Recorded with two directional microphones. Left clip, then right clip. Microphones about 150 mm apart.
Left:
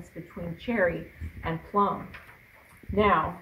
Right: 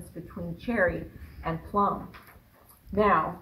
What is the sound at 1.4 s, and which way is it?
Speech, 25° left (ahead or behind).